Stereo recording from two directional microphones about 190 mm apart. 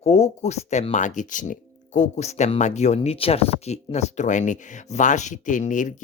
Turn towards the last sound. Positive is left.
turn(degrees=40)  # may be behind; listen again after turning